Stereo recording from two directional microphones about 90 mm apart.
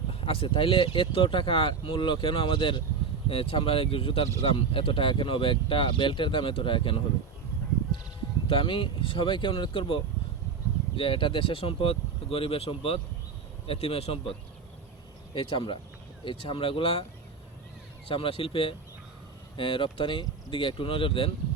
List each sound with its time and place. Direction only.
0.1 s speech: 90° left; by 2.8 s 60° left (ahead or behind)
3.2 s speech: 90° left; by 7.0 s 75° left (ahead or behind)
8.4 s speech: 75° left (ahead or behind)
15.4 s speech: 70° left (ahead or behind); by 17.1 s 90° left
18.1 s speech: 85° left
19.5 s speech: 70° left (ahead or behind)